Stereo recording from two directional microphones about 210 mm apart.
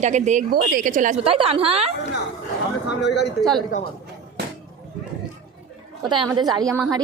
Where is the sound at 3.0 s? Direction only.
55° left (ahead or behind).